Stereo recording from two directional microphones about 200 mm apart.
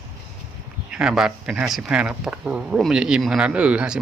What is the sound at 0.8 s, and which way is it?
Speech, 5° right (ahead or behind).